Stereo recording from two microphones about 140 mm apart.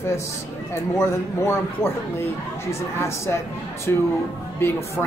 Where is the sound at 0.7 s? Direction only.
15° left (ahead or behind).